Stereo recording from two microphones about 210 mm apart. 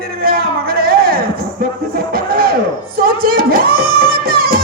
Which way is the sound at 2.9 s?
45° right (ahead or behind).